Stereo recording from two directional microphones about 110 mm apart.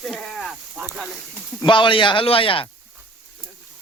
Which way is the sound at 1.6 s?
50° left (ahead or behind).